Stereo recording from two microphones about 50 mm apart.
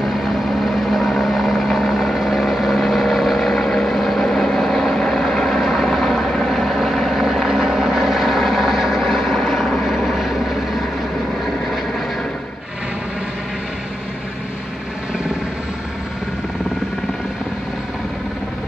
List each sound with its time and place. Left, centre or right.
0.7 s vehicle: centre